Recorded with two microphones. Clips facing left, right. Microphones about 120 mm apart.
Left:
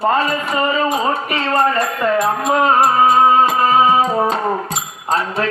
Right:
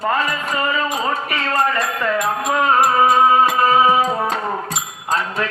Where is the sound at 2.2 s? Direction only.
30° left (ahead or behind).